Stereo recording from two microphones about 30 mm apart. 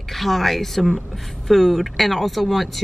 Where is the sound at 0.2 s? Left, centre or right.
Centre.